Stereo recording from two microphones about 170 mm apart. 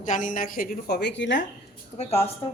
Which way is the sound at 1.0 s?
90° left.